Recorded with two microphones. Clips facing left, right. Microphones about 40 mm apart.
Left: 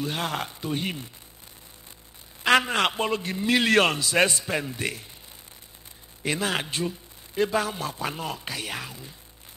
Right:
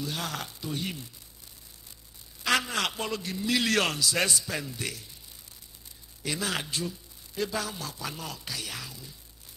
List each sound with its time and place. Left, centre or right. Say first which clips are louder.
0.0 s a man's voice: left 5 dB; left
2.4 s a man's voice: left 6 dB; left
6.2 s a man's voice: left 5 dB; left